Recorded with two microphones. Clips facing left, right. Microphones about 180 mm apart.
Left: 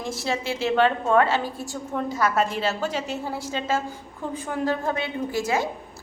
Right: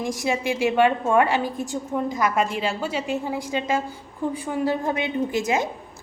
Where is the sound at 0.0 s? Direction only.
15° right (ahead or behind).